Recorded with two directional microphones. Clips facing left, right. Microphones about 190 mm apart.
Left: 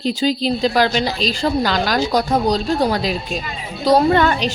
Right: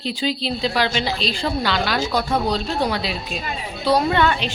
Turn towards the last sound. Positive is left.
turn(degrees=40)  # may be behind; listen again after turning